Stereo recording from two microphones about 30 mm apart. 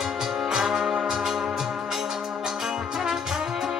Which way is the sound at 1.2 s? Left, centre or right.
Centre.